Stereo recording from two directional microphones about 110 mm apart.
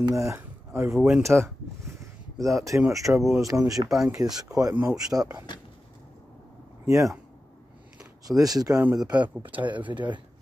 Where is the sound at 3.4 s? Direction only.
30° right (ahead or behind).